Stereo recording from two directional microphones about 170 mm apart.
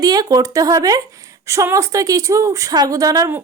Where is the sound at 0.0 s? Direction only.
25° right (ahead or behind).